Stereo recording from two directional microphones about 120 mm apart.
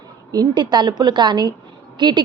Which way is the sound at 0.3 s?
35° right (ahead or behind).